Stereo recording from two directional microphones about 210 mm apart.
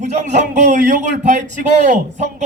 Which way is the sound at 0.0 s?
35° right (ahead or behind).